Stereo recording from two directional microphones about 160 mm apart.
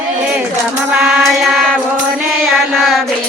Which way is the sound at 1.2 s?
Centre (ahead or behind).